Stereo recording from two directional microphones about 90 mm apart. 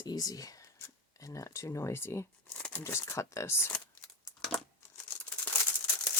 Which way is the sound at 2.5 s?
15° left (ahead or behind).